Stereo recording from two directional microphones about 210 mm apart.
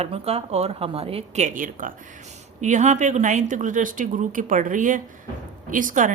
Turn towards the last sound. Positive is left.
turn(degrees=-40)  # may be behind; listen again after turning